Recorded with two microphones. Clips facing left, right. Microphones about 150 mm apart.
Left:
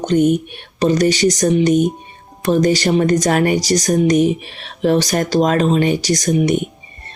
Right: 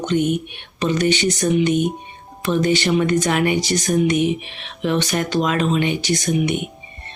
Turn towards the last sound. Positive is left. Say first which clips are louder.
# left 4 dB
turn(degrees=40)  # may be behind; listen again after turning